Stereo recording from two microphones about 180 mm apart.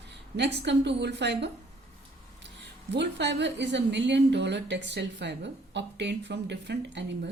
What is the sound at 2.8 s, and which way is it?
A woman's voice, 70° right (ahead or behind).